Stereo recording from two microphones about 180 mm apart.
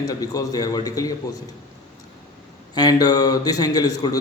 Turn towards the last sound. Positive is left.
turn(degrees=20)  # may be behind; listen again after turning